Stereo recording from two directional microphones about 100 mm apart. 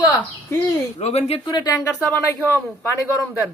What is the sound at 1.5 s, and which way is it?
Speech, 40° left (ahead or behind).